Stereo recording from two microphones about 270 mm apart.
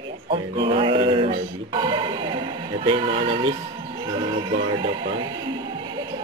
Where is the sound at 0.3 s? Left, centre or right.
Right.